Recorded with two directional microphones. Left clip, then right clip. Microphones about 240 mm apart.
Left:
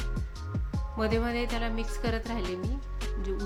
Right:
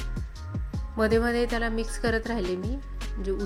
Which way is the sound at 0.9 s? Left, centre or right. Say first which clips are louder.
Right 6 dB; centre.